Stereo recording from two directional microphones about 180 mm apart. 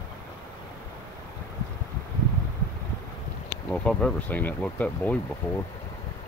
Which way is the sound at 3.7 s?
5° left (ahead or behind).